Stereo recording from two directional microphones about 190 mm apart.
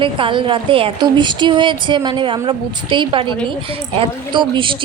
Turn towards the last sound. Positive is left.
turn(degrees=-25)  # may be behind; listen again after turning